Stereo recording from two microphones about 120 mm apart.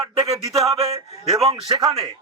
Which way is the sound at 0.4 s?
25° right (ahead or behind).